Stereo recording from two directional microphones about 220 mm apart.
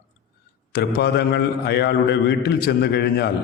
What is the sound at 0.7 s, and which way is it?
A man's voice, 45° left (ahead or behind).